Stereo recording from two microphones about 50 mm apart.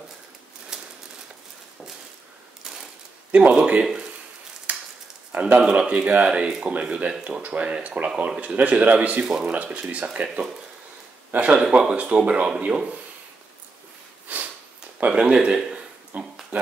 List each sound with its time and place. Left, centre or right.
3.3 s a sound: right
3.5 s speech: right
5.3 s speech: right
9.2 s speech: centre
9.5 s speech: right
11.3 s speech: right
11.9 s speech: right
14.2 s sniff: right
15.0 s speech: centre
16.1 s a sound: right